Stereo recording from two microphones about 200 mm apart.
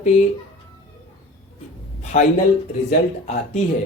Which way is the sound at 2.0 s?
35° left (ahead or behind).